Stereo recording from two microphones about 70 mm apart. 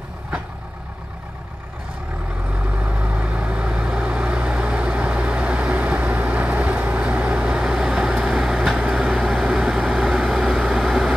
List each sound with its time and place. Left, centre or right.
2.5 s vehicle: centre